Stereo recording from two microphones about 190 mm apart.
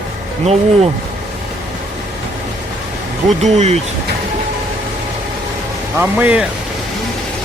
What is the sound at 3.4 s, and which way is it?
Speech, 35° right (ahead or behind).